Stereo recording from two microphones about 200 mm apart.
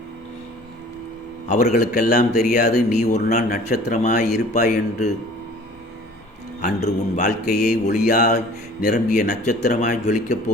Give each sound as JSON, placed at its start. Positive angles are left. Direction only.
{"t": 1.5, "sound": "a man's voice", "side_deg": 35}
{"t": 2.9, "sound": "speech", "side_deg": 35}
{"t": 6.6, "sound": "speech", "side_deg": 40}